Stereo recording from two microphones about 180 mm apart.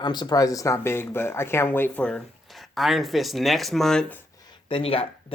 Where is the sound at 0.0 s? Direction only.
25° left (ahead or behind); by 4.2 s 5° left (ahead or behind).